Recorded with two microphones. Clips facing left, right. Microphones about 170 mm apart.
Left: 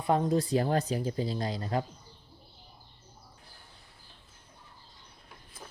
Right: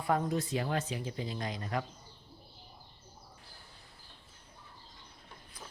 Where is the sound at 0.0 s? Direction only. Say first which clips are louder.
Left 5 dB; 30° left (ahead or behind).